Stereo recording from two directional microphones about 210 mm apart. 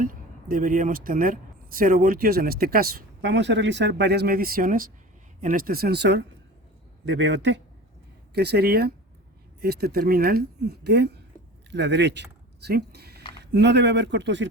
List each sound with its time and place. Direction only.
0.0 s a man's voice: 40° right (ahead or behind); by 14.4 s 60° right (ahead or behind)